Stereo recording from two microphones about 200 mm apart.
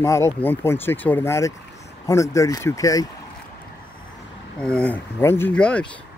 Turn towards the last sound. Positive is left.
turn(degrees=5)  # may be behind; listen again after turning